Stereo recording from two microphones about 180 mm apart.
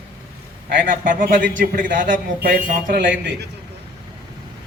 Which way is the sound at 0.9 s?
50° right (ahead or behind).